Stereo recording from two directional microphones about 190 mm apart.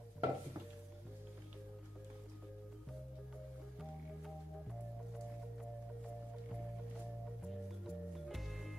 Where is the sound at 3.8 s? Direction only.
Centre (ahead or behind).